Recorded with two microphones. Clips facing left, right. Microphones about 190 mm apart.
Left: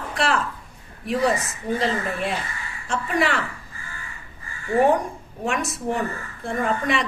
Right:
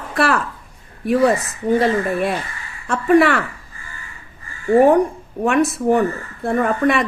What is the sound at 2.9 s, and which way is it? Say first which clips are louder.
Speech: right 9 dB; 60° right (ahead or behind).